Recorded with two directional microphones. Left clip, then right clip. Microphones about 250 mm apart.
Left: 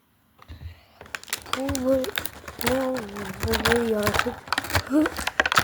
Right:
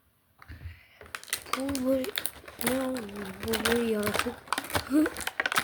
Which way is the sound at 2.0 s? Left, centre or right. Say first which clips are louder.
Left 4 dB; left.